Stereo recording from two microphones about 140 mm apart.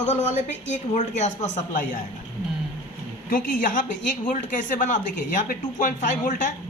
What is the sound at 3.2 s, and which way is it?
A woman's voice, 70° left (ahead or behind).